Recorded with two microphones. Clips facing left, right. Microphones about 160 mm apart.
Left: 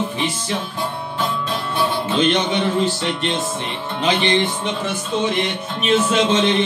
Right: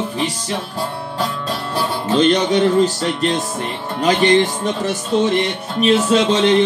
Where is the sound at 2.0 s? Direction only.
40° right (ahead or behind).